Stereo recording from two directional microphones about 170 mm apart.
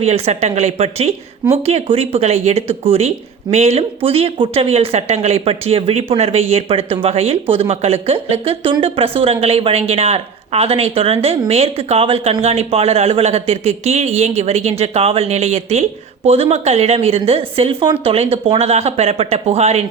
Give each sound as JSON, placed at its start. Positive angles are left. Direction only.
{"t": 0.0, "sound": "speech", "side_deg": -40}